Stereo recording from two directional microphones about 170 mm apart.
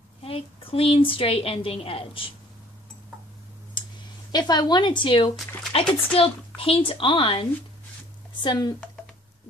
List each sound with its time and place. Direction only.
0.2 s a woman's voice: 35° left (ahead or behind)
4.3 s a woman's voice: 25° left (ahead or behind)
8.5 s a woman's voice: 25° left (ahead or behind)